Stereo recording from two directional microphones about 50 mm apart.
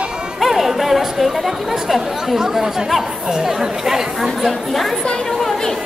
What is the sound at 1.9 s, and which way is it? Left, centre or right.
Speech, centre.